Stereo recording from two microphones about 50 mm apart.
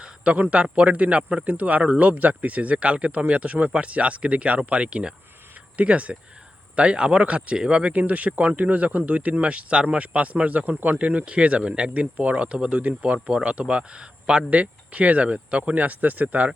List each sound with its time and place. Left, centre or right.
0.5 s a man's voice: right